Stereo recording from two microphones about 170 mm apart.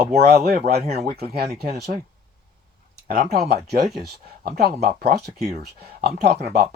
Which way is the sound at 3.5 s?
75° right (ahead or behind).